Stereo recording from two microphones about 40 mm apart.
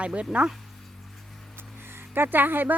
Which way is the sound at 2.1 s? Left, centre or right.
Right.